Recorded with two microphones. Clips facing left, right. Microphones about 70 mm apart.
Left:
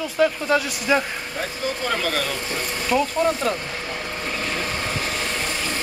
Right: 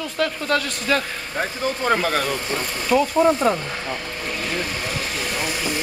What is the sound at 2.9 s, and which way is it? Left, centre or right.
Speech, centre.